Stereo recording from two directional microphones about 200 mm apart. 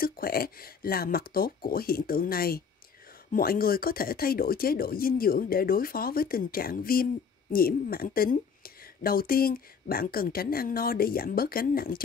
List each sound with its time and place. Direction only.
0.0 s speech: 45° left (ahead or behind)